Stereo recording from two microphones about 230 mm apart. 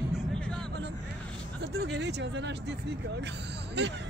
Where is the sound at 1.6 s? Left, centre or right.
Right.